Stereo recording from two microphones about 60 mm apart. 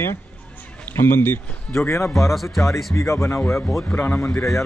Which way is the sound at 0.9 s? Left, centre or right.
Left.